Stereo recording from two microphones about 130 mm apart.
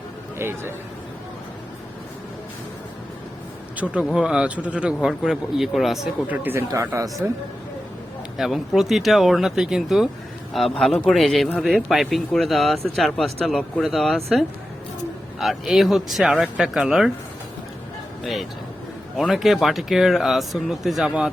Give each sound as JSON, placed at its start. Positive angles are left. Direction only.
{"t": 0.3, "sound": "speech", "side_deg": -20}
{"t": 3.9, "sound": "speech", "side_deg": -5}
{"t": 6.2, "sound": "speech", "side_deg": -15}
{"t": 8.4, "sound": "speech", "side_deg": 0}
{"t": 15.4, "sound": "speech", "side_deg": 0}
{"t": 19.1, "sound": "speech", "side_deg": 0}